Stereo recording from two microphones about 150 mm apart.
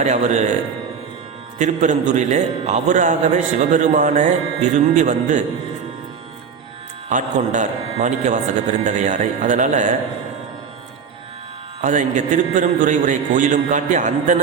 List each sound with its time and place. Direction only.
0.0 s a man's voice: 50° right (ahead or behind)
1.5 s a man's voice: 55° right (ahead or behind)
7.1 s a man's voice: 55° right (ahead or behind)
11.8 s a man's voice: 55° right (ahead or behind)